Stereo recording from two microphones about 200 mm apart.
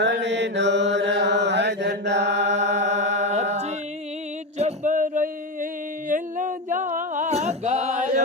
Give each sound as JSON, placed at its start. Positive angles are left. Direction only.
{"t": 0.0, "sound": "chant", "side_deg": -60}
{"t": 2.8, "sound": "music", "side_deg": -60}
{"t": 3.2, "sound": "music", "side_deg": -35}
{"t": 6.1, "sound": "a sound", "side_deg": -40}